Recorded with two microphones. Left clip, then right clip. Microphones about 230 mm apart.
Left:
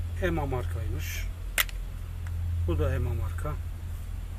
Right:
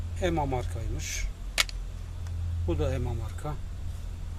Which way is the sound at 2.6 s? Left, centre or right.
Right.